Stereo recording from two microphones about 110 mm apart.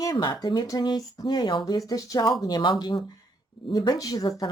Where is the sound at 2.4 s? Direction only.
40° left (ahead or behind).